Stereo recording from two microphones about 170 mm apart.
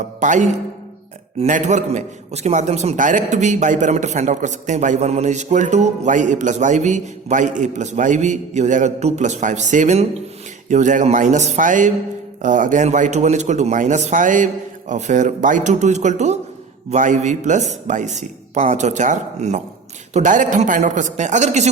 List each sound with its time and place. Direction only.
0.2 s a man's voice: 45° right (ahead or behind)